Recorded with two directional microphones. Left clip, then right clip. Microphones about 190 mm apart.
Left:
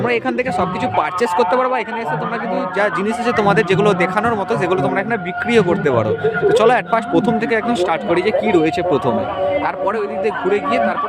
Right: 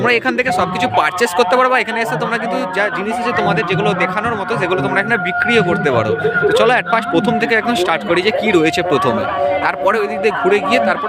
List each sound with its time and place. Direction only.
0.9 s speech: 5° left (ahead or behind)
3.3 s speech: 30° left (ahead or behind)
5.5 s speech: 15° left (ahead or behind)
9.8 s a man's voice: 10° right (ahead or behind)